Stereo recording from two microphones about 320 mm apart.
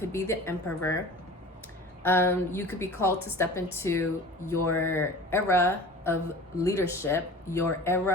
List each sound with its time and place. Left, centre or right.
0.0 s speech: centre
2.0 s speech: centre